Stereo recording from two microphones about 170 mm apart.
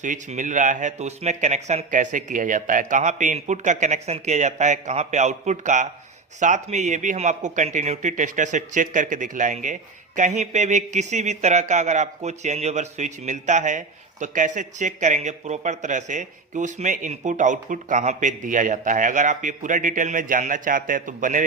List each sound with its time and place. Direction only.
0.0 s speech: 45° right (ahead or behind)